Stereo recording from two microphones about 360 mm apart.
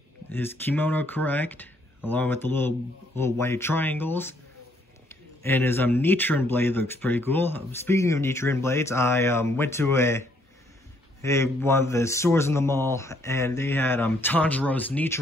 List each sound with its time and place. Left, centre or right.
0.3 s speech: centre
5.4 s speech: centre